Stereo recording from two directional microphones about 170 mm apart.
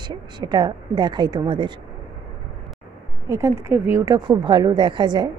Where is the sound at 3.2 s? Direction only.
15° right (ahead or behind).